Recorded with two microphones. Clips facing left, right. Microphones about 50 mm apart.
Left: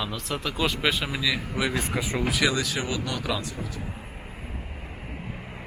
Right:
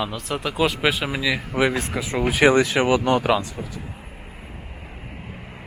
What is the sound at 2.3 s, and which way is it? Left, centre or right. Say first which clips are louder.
Speech: right 11 dB; right.